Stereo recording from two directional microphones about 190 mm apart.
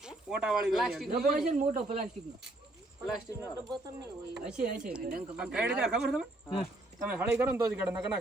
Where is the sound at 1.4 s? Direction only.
40° right (ahead or behind).